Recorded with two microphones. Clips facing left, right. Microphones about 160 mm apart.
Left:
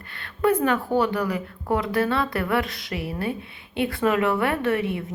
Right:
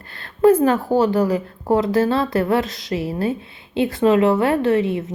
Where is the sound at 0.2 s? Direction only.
35° right (ahead or behind).